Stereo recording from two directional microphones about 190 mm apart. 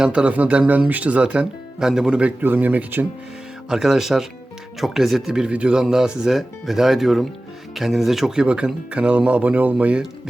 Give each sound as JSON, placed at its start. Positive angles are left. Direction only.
{"t": 0.0, "sound": "speech", "side_deg": -5}